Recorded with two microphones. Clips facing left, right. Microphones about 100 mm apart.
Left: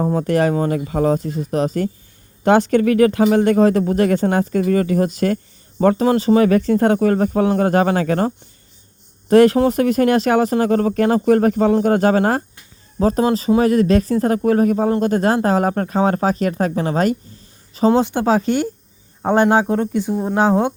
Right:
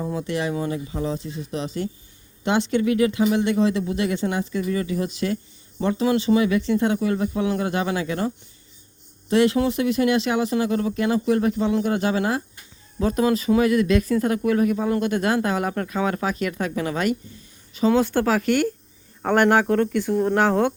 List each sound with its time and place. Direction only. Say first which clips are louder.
0.0 s speech: left 9 dB; 45° left (ahead or behind)
0.8 s speech: left 10 dB; 65° left (ahead or behind)
9.3 s speech: left 7 dB; 45° left (ahead or behind)
13.0 s speech: left 4 dB; 35° left (ahead or behind)
18.0 s speech: left 4 dB; 20° left (ahead or behind)